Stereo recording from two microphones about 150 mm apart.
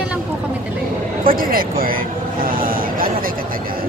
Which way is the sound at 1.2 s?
70° right (ahead or behind).